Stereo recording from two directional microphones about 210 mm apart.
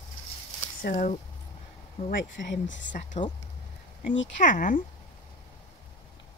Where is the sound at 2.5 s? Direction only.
60° left (ahead or behind).